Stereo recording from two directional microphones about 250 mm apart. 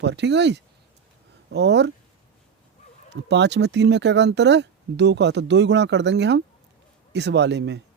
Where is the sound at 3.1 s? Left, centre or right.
Right.